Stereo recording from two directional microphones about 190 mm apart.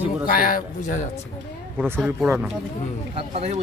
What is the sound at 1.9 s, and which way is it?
Speech, 10° right (ahead or behind).